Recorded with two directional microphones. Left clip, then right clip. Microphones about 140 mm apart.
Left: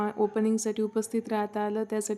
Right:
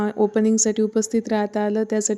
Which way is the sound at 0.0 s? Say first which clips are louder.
Right 7 dB; 35° right (ahead or behind).